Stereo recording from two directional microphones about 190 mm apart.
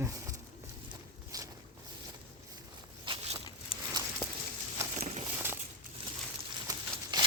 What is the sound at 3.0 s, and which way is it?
Walk, 30° right (ahead or behind).